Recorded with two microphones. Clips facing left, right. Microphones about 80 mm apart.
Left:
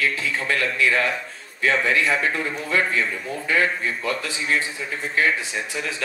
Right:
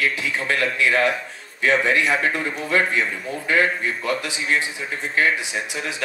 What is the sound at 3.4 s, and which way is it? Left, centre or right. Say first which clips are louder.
A man's voice: right 2 dB; right.